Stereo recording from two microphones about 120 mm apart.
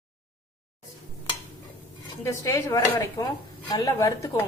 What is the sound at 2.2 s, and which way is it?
A woman's voice, 25° left (ahead or behind).